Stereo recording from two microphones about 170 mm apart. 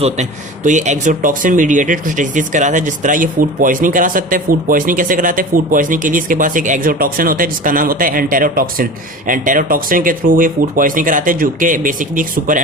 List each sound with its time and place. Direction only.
0.0 s speech: 45° right (ahead or behind)